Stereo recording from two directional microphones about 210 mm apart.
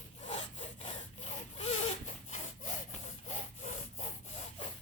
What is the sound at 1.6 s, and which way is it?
Sawing, 30° left (ahead or behind).